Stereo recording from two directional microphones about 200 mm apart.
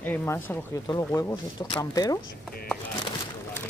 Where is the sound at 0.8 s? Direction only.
20° left (ahead or behind).